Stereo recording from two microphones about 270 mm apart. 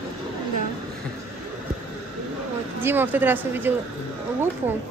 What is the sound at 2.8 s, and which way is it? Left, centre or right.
Speech, centre.